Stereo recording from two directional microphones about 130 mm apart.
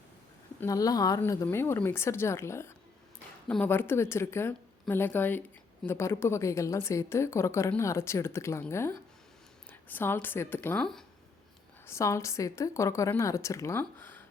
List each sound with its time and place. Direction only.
0.6 s a woman's voice: 25° left (ahead or behind)
11.9 s speech: 20° left (ahead or behind)